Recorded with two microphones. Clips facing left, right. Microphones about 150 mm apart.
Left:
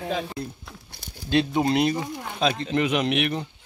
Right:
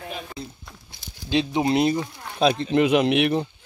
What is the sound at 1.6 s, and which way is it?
Speech, 5° right (ahead or behind).